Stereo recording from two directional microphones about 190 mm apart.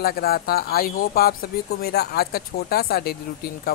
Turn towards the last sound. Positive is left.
turn(degrees=55)  # may be behind; listen again after turning